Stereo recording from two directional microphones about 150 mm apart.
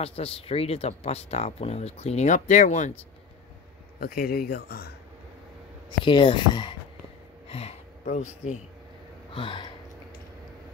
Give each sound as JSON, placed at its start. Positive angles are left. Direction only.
{"t": 0.0, "sound": "speech", "side_deg": 40}
{"t": 4.0, "sound": "speech", "side_deg": 75}
{"t": 5.9, "sound": "speech", "side_deg": 30}
{"t": 7.4, "sound": "speech", "side_deg": 40}
{"t": 9.3, "sound": "speech", "side_deg": 35}